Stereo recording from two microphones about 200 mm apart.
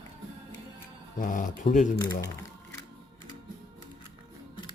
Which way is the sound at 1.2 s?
40° left (ahead or behind).